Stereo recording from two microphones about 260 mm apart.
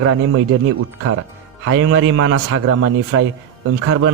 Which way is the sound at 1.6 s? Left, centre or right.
Right.